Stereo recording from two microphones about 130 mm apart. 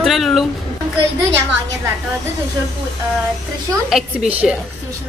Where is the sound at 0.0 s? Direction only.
Centre (ahead or behind).